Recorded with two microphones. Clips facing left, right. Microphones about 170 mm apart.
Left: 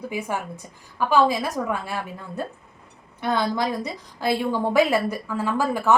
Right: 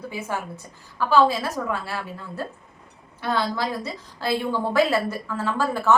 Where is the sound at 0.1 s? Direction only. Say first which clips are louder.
Left 1 dB; 15° left (ahead or behind).